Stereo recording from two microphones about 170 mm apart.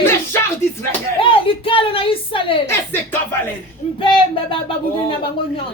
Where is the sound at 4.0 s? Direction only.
30° left (ahead or behind).